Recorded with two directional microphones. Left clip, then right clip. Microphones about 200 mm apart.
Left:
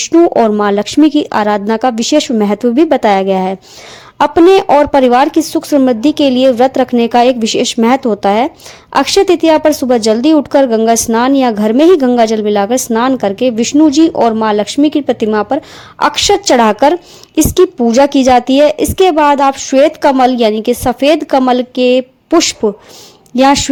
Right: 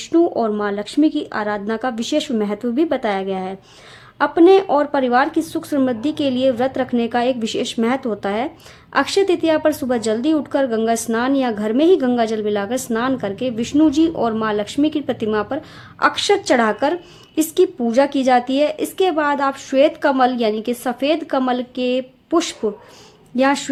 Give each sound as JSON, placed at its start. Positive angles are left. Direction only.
{"t": 0.0, "sound": "a woman's voice", "side_deg": 30}